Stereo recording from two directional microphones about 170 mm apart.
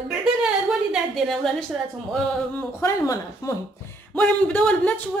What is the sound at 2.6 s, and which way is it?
A woman's voice, 15° left (ahead or behind).